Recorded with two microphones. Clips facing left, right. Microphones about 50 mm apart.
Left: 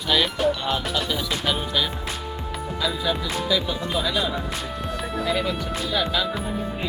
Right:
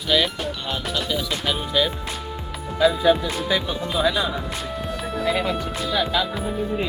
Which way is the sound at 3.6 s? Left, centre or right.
Centre.